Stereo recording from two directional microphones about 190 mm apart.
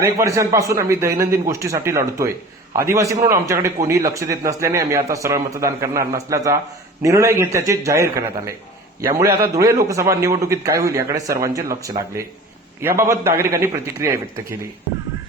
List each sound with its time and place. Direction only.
0.0 s a man's voice: 15° right (ahead or behind)
9.6 s a man's voice: 15° right (ahead or behind)